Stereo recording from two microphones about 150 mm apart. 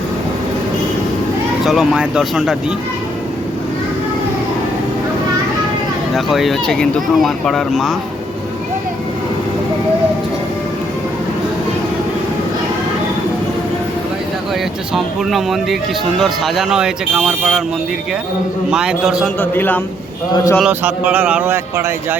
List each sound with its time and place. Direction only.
1.6 s speech: centre (ahead or behind)
6.1 s speech: centre (ahead or behind)
14.9 s speech: centre (ahead or behind)
18.7 s speech: 5° right (ahead or behind)
19.4 s a man's voice: 15° left (ahead or behind)
20.3 s a man's voice: 25° left (ahead or behind)
20.7 s a man's voice: 10° right (ahead or behind)